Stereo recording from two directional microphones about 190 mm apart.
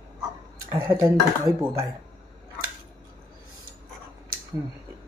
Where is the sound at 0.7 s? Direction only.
10° right (ahead or behind).